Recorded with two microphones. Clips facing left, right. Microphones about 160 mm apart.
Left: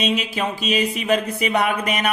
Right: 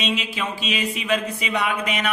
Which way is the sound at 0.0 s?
45° left (ahead or behind).